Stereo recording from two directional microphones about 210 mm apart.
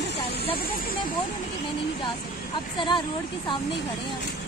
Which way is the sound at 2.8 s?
20° left (ahead or behind).